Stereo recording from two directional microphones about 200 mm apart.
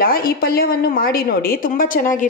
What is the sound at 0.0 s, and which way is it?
A woman's voice, 45° left (ahead or behind).